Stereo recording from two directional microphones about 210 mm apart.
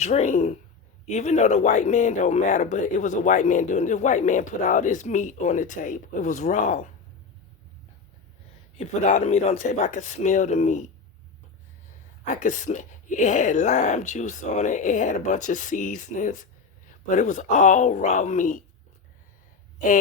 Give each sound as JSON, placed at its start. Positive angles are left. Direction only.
{"t": 0.0, "sound": "speech", "side_deg": 35}
{"t": 8.8, "sound": "speech", "side_deg": 35}
{"t": 12.2, "sound": "speech", "side_deg": 35}